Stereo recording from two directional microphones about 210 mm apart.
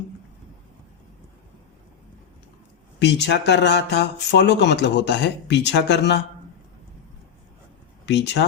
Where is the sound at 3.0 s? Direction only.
55° left (ahead or behind).